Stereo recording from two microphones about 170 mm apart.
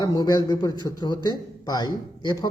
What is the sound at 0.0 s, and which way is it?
A man's voice, 20° left (ahead or behind).